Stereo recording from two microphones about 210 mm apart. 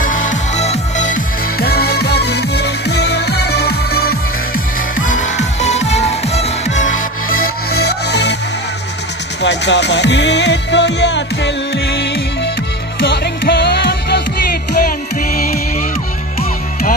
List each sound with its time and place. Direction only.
0.0 s music: 40° left (ahead or behind)
4.9 s music: 40° left (ahead or behind); by 8.4 s 55° left (ahead or behind)
9.4 s music: 55° left (ahead or behind)